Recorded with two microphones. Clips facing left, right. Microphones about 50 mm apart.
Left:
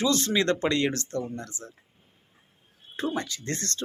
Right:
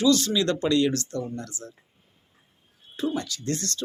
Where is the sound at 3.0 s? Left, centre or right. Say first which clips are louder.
Right 1 dB; left.